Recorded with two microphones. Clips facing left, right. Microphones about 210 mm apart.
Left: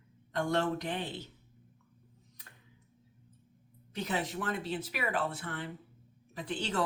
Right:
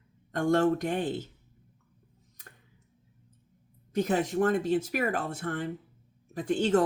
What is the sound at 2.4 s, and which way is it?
Tick-tock, 45° right (ahead or behind).